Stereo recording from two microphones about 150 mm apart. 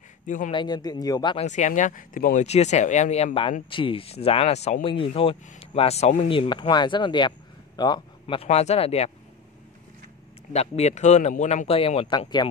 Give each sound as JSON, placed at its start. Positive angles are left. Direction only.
{"t": 0.5, "sound": "speech", "side_deg": 30}
{"t": 1.4, "sound": "speech", "side_deg": 55}
{"t": 2.4, "sound": "speech", "side_deg": 45}
{"t": 8.4, "sound": "speech", "side_deg": 45}
{"t": 10.5, "sound": "speech", "side_deg": 45}